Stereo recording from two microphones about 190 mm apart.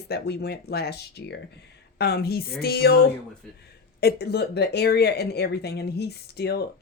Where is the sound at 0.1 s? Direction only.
60° left (ahead or behind).